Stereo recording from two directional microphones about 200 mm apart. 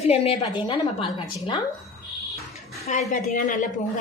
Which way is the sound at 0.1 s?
30° left (ahead or behind).